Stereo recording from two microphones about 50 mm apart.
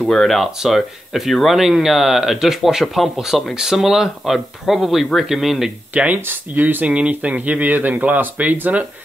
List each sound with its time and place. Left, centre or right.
0.1 s speech: centre
0.4 s speech: centre
6.2 s speech: right